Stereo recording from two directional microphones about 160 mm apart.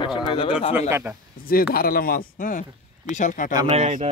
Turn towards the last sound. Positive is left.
turn(degrees=-45)  # may be behind; listen again after turning